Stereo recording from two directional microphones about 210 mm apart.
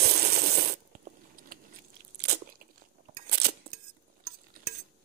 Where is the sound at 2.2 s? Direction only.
50° right (ahead or behind).